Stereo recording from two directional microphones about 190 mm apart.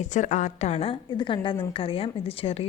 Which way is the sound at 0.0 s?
40° left (ahead or behind).